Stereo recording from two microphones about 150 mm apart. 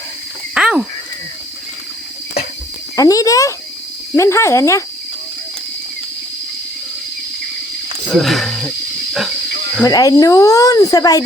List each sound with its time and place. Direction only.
0.5 s a sound: 5° right (ahead or behind)
2.9 s speech: 25° left (ahead or behind)
8.1 s wild animals: centre (ahead or behind)
9.8 s speech: 25° left (ahead or behind)